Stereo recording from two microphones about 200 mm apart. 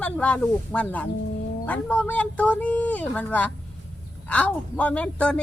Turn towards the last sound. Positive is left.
turn(degrees=5)  # may be behind; listen again after turning